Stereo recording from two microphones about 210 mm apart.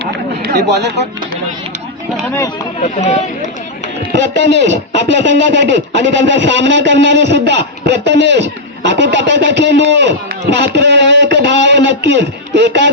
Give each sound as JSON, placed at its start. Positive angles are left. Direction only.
{"t": 0.4, "sound": "speech", "side_deg": -55}
{"t": 3.0, "sound": "speech", "side_deg": 35}
{"t": 4.1, "sound": "a sound", "side_deg": -55}